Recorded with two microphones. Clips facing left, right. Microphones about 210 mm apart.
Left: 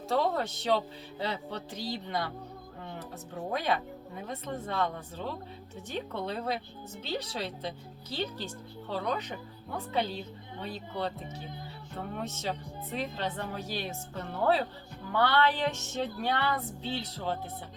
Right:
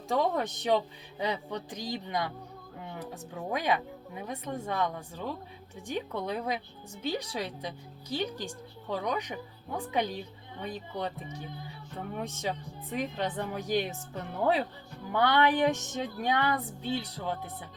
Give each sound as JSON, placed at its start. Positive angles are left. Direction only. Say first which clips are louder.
{"t": 0.1, "sound": "speech", "louder": "right 1 dB", "side_deg": -15}
{"t": 3.5, "sound": "speech", "louder": "right 1 dB", "side_deg": -15}